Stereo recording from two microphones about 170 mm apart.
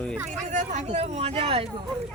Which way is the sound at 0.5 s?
45° right (ahead or behind).